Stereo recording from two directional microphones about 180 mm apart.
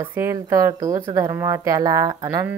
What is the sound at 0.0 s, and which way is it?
Speech, 15° right (ahead or behind).